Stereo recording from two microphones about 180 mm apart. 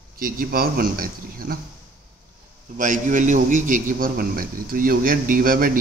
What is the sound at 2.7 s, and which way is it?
A man's voice, 45° right (ahead or behind).